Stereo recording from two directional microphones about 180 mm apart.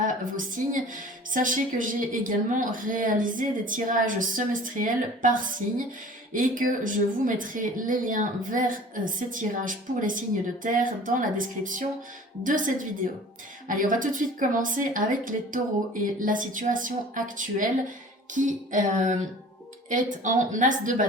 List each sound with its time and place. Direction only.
0.0 s a woman's voice: 50° right (ahead or behind)